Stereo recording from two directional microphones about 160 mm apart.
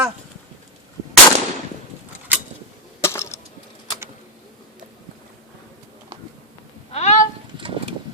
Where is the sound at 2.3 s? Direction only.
10° right (ahead or behind).